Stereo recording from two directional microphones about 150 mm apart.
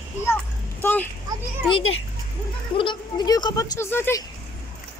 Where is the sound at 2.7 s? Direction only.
30° left (ahead or behind); by 4.2 s 15° left (ahead or behind).